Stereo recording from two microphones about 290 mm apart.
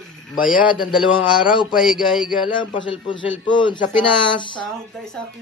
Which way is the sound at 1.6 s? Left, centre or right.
Centre.